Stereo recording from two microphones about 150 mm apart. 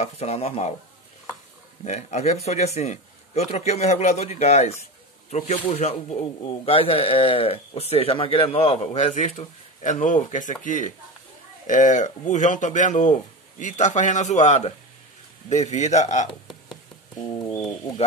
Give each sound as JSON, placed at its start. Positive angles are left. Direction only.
{"t": 0.0, "sound": "a man's voice", "side_deg": 45}
{"t": 1.9, "sound": "a man's voice", "side_deg": 50}
{"t": 5.8, "sound": "a man's voice", "side_deg": 45}
{"t": 17.2, "sound": "bird", "side_deg": 25}